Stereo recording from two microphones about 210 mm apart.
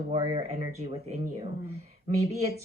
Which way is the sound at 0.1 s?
30° right (ahead or behind).